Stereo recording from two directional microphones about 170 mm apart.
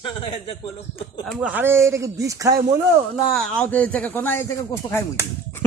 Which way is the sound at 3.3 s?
5° left (ahead or behind).